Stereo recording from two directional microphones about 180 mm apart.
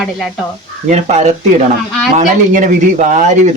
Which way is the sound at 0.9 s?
40° right (ahead or behind).